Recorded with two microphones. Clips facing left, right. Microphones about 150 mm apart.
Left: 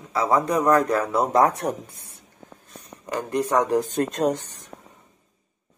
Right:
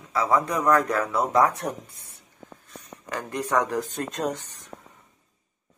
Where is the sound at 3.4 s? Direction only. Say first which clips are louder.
Left 4 dB; 25° left (ahead or behind).